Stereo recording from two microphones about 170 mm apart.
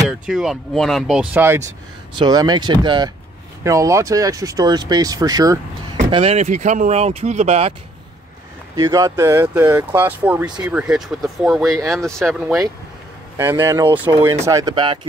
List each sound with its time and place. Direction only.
0.3 s speech: centre (ahead or behind)
2.1 s speech: 25° right (ahead or behind)
6.1 s speech: 35° right (ahead or behind)
8.7 s speech: 20° right (ahead or behind); by 12.5 s centre (ahead or behind)
13.4 s speech: 15° right (ahead or behind)